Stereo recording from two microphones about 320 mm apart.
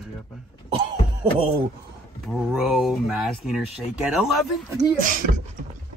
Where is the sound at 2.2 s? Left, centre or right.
Centre.